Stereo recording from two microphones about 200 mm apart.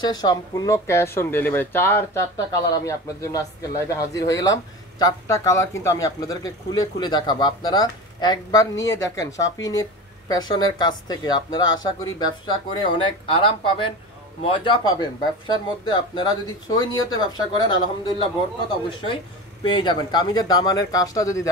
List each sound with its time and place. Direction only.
0.0 s speech: 20° left (ahead or behind)
19.6 s speech: 20° left (ahead or behind)